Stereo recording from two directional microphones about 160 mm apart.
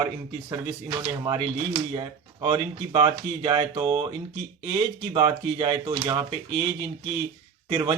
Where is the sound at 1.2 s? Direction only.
35° right (ahead or behind).